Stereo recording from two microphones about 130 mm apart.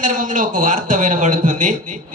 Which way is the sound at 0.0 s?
90° right.